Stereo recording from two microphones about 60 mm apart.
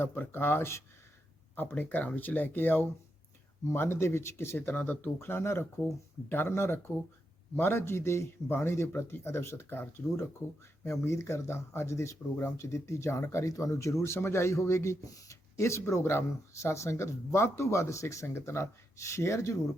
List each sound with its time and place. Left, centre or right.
0.0 s speech: left
1.7 s speech: left
3.7 s speech: left
5.2 s speech: left
10.8 s speech: left